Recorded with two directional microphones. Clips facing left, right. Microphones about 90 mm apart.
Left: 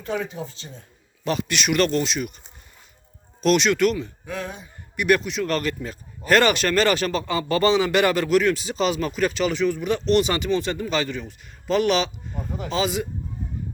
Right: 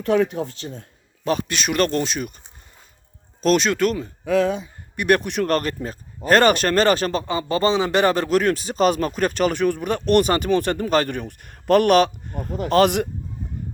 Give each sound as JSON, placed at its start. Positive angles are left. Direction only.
{"t": 0.0, "sound": "speech", "side_deg": -70}
{"t": 1.2, "sound": "speech", "side_deg": -35}
{"t": 3.4, "sound": "speech", "side_deg": -40}
{"t": 4.3, "sound": "speech", "side_deg": -90}
{"t": 4.9, "sound": "speech", "side_deg": -45}
{"t": 7.3, "sound": "a man's voice", "side_deg": -25}